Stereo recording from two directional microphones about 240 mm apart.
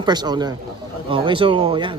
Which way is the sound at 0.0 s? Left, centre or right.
Centre.